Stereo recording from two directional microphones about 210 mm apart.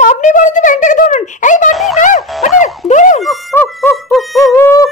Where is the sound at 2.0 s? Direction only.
35° left (ahead or behind).